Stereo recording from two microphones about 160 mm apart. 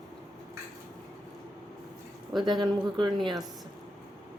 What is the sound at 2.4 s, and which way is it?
Speech, 30° right (ahead or behind).